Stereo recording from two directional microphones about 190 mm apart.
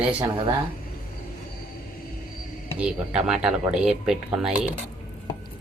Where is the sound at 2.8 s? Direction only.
5° right (ahead or behind).